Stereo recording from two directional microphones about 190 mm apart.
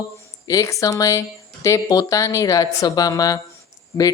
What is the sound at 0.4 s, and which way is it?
Speech, 15° left (ahead or behind).